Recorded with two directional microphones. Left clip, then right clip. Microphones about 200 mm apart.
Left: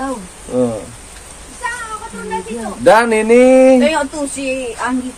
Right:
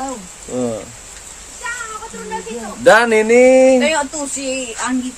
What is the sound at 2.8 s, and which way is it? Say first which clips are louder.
Speech: even; 25° right (ahead or behind).